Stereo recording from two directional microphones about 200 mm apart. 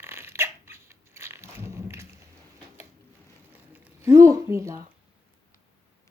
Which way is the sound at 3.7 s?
10° right (ahead or behind).